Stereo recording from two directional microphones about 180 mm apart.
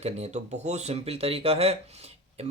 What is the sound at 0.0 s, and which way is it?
Speech, 35° right (ahead or behind).